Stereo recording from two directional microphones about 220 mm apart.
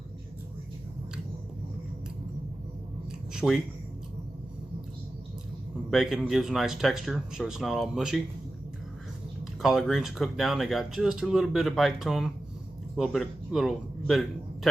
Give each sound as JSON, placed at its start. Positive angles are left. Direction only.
{"t": 3.3, "sound": "speech", "side_deg": 0}
{"t": 5.9, "sound": "speech", "side_deg": 0}
{"t": 9.6, "sound": "a man's voice", "side_deg": 0}